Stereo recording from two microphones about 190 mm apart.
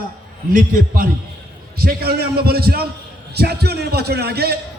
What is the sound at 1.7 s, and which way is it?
A man's voice, 55° right (ahead or behind).